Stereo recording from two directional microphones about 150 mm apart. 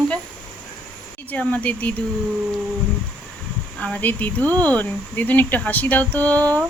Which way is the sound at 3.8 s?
10° left (ahead or behind).